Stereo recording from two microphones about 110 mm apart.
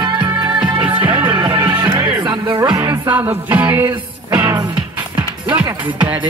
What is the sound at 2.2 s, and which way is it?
Music, 40° right (ahead or behind).